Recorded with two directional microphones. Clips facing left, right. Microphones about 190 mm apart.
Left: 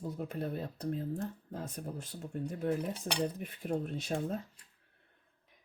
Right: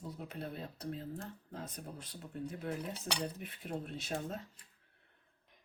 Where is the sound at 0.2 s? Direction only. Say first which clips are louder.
Left 6 dB; 50° left (ahead or behind).